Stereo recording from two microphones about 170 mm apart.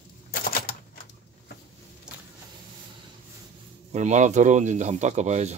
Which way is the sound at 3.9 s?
45° right (ahead or behind).